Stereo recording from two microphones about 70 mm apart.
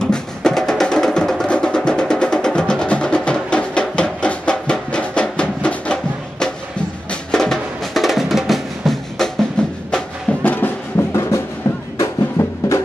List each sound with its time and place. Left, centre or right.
0.0 s music: centre
7.1 s music: centre
9.6 s music: centre
10.4 s music: left
11.1 s music: left